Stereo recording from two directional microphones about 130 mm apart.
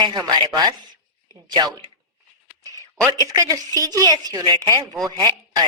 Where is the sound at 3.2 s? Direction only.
30° right (ahead or behind).